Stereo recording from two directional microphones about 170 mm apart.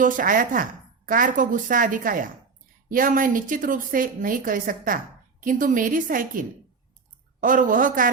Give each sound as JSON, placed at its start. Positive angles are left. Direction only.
{"t": 0.0, "sound": "a woman's voice", "side_deg": -50}
{"t": 7.4, "sound": "a woman's voice", "side_deg": -50}